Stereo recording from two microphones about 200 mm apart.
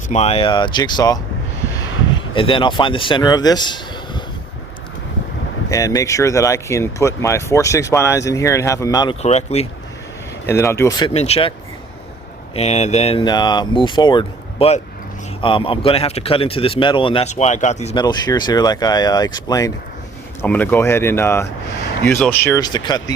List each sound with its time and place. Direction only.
0.1 s speech: 30° left (ahead or behind)
2.3 s speech: 25° left (ahead or behind)
5.6 s speech: 15° left (ahead or behind)
9.2 s speech: 35° left (ahead or behind)
10.4 s speech: 15° left (ahead or behind)
11.1 s speech: 30° left (ahead or behind)
12.5 s speech: 35° left (ahead or behind)
17.9 s speech: 20° left (ahead or behind)